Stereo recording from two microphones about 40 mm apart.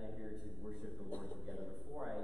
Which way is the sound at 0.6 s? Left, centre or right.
Right.